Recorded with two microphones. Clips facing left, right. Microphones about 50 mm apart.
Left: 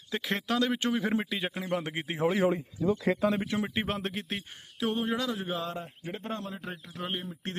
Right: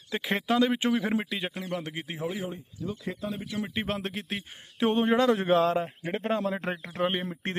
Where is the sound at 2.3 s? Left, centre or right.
Left.